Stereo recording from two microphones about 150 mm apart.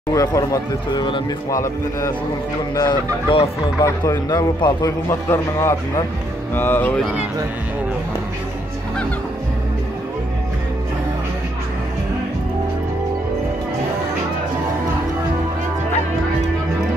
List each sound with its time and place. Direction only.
0.1 s a man's voice: 20° left (ahead or behind)
3.8 s a man's voice: 20° left (ahead or behind)